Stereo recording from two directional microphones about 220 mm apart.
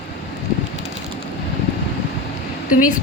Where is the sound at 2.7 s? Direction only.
40° left (ahead or behind).